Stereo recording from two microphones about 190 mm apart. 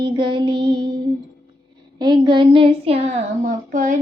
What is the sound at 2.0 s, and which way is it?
Child singing, 25° right (ahead or behind).